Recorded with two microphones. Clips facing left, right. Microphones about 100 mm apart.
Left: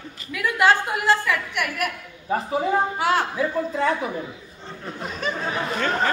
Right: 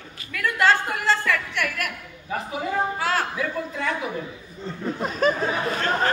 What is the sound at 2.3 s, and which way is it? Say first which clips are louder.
Speech: left 5 dB; 30° left (ahead or behind).